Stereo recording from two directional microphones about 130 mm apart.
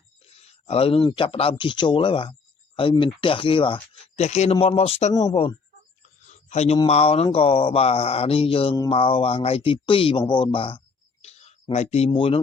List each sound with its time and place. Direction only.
0.3 s a sound: 50° left (ahead or behind)
1.1 s speech: 45° left (ahead or behind)
4.6 s music: 45° left (ahead or behind)
6.2 s a sound: 60° left (ahead or behind)
6.8 s music: 50° left (ahead or behind)
8.9 s speech: 45° left (ahead or behind)
11.7 s music: 55° left (ahead or behind)